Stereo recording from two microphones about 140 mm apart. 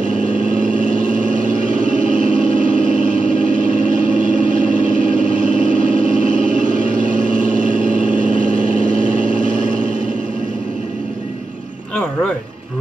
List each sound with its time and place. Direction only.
0.0 s vehicle: 70° right (ahead or behind)